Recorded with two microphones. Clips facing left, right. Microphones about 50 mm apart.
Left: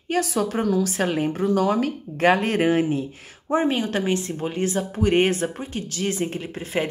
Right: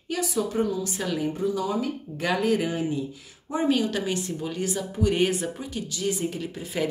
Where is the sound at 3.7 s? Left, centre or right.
Left.